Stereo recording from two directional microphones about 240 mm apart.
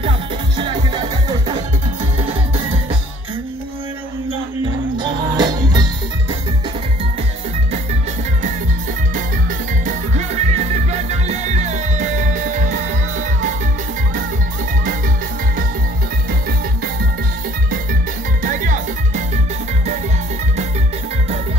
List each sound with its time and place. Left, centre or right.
0.6 s music: centre
4.9 s music: centre
9.8 s music: right
18.4 s music: right